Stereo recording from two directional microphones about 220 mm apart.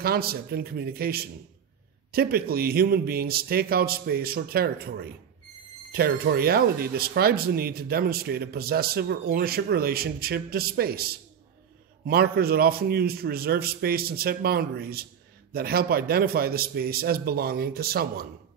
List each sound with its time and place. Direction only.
0.0 s speech: 45° right (ahead or behind)